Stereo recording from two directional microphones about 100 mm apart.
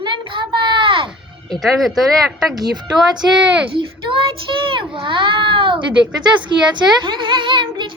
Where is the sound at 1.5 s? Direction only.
Centre (ahead or behind).